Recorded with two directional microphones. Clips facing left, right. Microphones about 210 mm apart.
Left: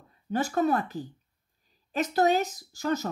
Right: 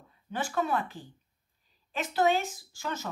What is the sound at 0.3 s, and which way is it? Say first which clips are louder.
Speech: left 5 dB; 40° left (ahead or behind).